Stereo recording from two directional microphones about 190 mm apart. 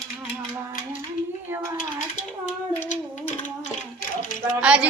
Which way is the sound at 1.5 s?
15° right (ahead or behind).